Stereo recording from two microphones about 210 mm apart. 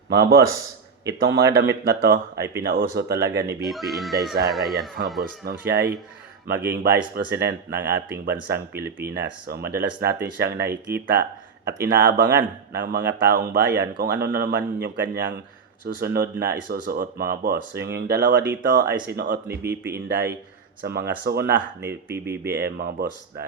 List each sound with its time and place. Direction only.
0.1 s speech: 55° right (ahead or behind)
3.7 s speech: centre (ahead or behind)
5.5 s speech: 50° right (ahead or behind)
21.8 s speech: 10° right (ahead or behind)
22.4 s speech: 50° right (ahead or behind)